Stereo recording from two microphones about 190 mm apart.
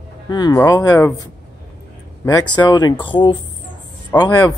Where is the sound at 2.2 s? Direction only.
20° left (ahead or behind).